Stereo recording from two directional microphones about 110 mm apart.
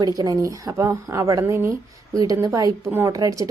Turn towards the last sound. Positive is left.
turn(degrees=-30)  # may be behind; listen again after turning